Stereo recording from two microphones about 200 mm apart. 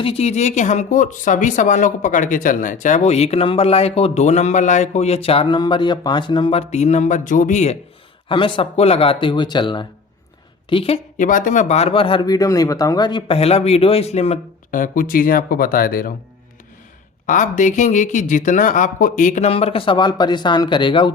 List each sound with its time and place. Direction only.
0.0 s speech: 30° left (ahead or behind); by 16.1 s 45° left (ahead or behind)
17.2 s speech: 40° left (ahead or behind)